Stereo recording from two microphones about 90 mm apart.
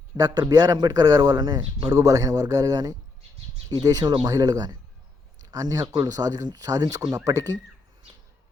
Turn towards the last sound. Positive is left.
turn(degrees=-40)  # may be behind; listen again after turning